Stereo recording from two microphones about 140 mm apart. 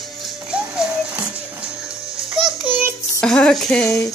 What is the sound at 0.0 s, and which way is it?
Music, centre (ahead or behind).